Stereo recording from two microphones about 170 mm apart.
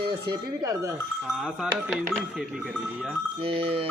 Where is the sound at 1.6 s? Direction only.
5° right (ahead or behind).